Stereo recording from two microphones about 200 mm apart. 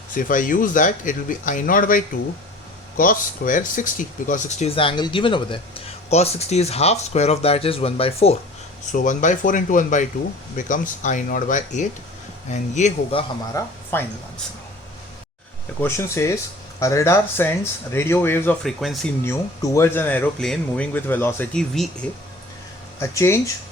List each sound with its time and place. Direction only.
0.1 s speech: 45° left (ahead or behind)
13.5 s speech: 10° left (ahead or behind)
15.8 s speech: 15° left (ahead or behind)
18.8 s speech: centre (ahead or behind)
19.2 s speech: 15° left (ahead or behind)
23.0 s speech: 15° left (ahead or behind)